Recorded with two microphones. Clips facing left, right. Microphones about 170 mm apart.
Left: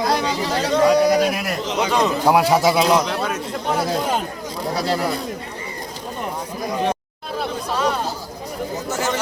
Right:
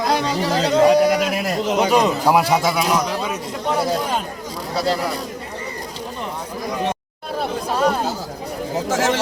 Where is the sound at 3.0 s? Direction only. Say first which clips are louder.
Even; 10° right (ahead or behind).